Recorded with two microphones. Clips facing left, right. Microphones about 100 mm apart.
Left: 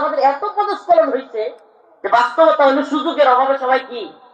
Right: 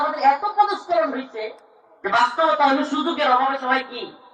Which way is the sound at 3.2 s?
40° left (ahead or behind).